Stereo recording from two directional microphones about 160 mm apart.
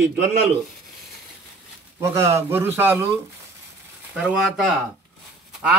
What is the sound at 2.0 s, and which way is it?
A man's voice, 15° right (ahead or behind).